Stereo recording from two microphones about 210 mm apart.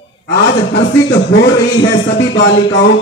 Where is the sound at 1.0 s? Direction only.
55° left (ahead or behind).